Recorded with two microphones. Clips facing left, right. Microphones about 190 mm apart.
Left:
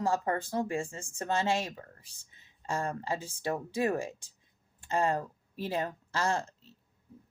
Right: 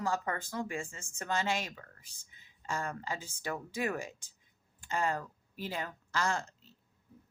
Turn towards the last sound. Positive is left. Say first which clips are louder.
# left 3 dB
turn(degrees=30)  # may be behind; listen again after turning